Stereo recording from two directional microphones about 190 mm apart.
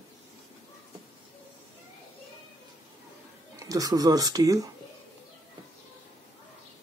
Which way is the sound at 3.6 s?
20° right (ahead or behind).